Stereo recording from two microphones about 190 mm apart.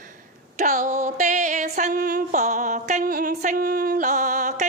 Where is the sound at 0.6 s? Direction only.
40° right (ahead or behind).